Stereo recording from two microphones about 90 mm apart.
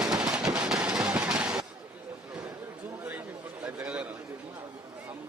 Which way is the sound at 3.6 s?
10° right (ahead or behind).